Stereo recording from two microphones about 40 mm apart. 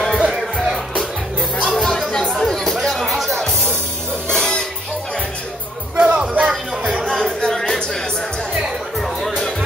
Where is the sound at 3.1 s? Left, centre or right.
Centre.